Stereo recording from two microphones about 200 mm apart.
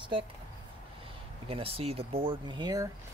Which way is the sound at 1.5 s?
30° right (ahead or behind).